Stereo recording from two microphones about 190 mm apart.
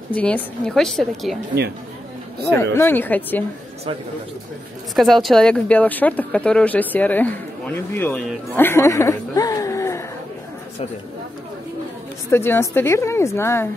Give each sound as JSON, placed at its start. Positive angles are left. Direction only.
{"t": 0.1, "sound": "a woman's voice", "side_deg": 5}
{"t": 2.5, "sound": "speech", "side_deg": 15}
{"t": 4.9, "sound": "speech", "side_deg": 0}
{"t": 12.3, "sound": "speech", "side_deg": 15}